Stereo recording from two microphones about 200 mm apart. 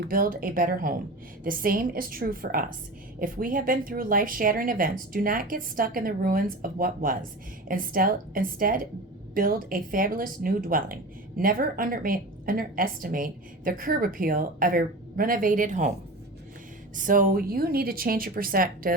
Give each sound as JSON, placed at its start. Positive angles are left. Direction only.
{"t": 0.0, "sound": "speech", "side_deg": -45}
{"t": 16.9, "sound": "speech", "side_deg": -40}